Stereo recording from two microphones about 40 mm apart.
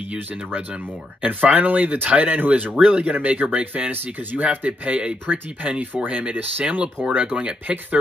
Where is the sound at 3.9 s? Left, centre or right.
Right.